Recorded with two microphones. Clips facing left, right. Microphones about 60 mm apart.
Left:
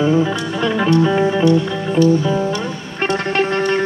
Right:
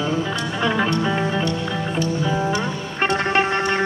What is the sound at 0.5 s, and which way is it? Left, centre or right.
Music, centre.